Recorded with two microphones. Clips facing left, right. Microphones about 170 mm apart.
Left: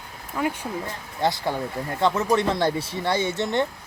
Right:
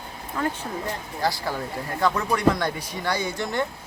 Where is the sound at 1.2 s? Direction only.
20° left (ahead or behind).